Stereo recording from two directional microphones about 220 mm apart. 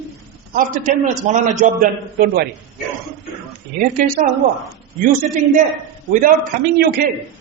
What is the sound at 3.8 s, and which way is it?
Speech, 35° right (ahead or behind).